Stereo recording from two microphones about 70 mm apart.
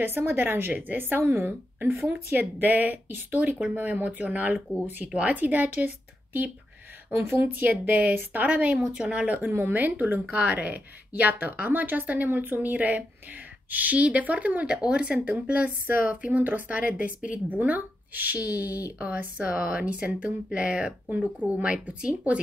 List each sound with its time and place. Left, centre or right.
0.0 s a woman's voice: right
7.2 s a woman's voice: right; by 22.4 s centre